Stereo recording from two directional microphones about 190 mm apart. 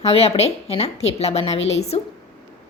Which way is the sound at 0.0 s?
35° left (ahead or behind).